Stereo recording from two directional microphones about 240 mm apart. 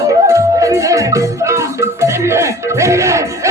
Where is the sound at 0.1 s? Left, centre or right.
Centre.